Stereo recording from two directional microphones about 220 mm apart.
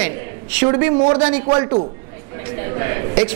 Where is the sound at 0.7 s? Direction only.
20° right (ahead or behind).